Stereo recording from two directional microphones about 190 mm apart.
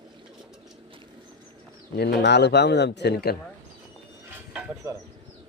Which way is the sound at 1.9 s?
60° left (ahead or behind).